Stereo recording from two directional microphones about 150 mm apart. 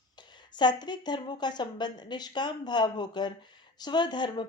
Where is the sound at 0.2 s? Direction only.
30° left (ahead or behind).